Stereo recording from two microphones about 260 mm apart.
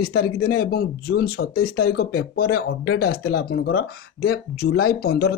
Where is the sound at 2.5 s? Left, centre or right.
Left.